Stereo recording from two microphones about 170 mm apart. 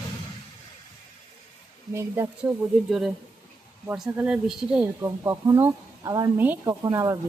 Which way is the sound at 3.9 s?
5° right (ahead or behind).